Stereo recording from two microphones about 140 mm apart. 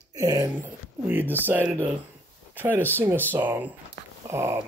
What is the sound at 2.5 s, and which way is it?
Speech, 15° right (ahead or behind).